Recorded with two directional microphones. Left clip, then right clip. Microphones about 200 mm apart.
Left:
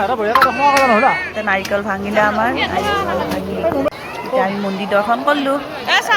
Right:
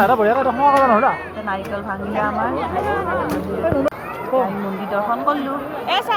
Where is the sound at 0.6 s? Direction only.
10° right (ahead or behind).